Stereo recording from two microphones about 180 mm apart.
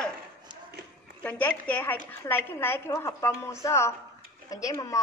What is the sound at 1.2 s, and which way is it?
A woman's voice, 10° left (ahead or behind).